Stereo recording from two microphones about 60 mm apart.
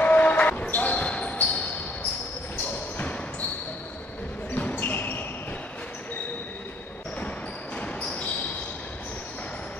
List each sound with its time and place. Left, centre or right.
0.0 s basketball bounce: left
4.6 s basketball bounce: left
7.7 s basketball bounce: left